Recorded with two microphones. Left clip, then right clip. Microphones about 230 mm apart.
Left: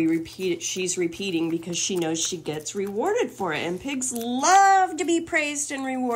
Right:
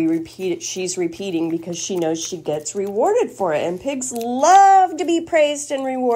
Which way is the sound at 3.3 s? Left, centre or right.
Left.